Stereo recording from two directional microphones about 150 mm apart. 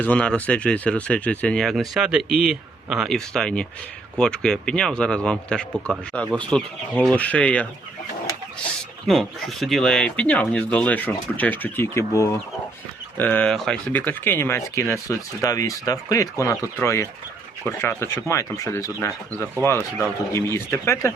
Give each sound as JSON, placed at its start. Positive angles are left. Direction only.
{"t": 0.0, "sound": "speech", "side_deg": 10}
{"t": 9.0, "sound": "speech", "side_deg": 0}
{"t": 14.0, "sound": "speech", "side_deg": 15}